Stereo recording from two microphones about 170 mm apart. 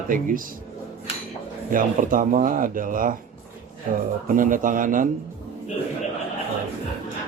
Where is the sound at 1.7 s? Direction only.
55° right (ahead or behind).